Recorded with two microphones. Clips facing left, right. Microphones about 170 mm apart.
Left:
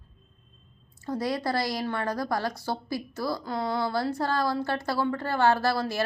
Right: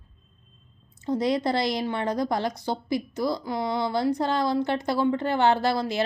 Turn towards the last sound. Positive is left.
turn(degrees=-20)  # may be behind; listen again after turning